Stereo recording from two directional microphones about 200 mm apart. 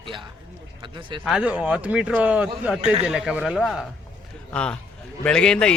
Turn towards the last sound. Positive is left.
turn(degrees=5)  # may be behind; listen again after turning